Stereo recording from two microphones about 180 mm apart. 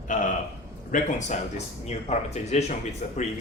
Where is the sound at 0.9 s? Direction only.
45° left (ahead or behind).